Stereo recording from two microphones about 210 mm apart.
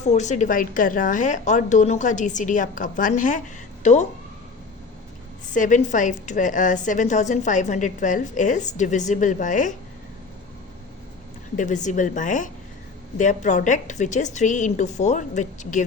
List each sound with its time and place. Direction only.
0.0 s a woman's voice: 35° left (ahead or behind)
5.5 s a woman's voice: 35° left (ahead or behind)
11.5 s a woman's voice: 35° left (ahead or behind)